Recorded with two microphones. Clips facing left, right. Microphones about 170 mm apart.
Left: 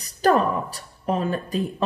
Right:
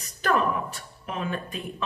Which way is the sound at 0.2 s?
35° left (ahead or behind).